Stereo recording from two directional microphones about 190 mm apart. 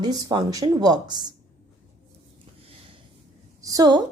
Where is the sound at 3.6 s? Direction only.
20° right (ahead or behind).